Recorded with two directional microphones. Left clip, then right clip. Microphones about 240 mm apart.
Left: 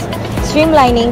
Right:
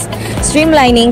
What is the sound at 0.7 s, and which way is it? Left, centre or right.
Speech, right.